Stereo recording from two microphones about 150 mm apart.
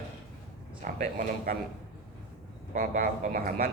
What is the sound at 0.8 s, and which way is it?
Speech, 60° right (ahead or behind).